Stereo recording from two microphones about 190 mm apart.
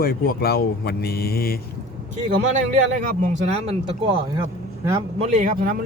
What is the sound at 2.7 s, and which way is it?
A man's voice, 40° right (ahead or behind).